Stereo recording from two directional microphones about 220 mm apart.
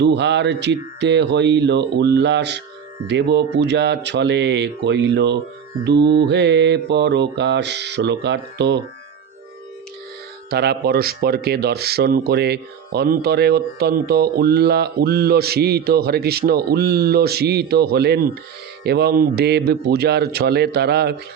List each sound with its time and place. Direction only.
0.0 s speech: 50° right (ahead or behind)
10.5 s speech: 45° right (ahead or behind)